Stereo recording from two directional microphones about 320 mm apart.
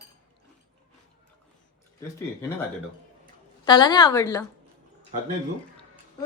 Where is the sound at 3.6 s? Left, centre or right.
Centre.